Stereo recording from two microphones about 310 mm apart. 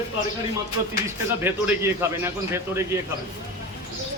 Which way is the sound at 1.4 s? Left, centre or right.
Centre.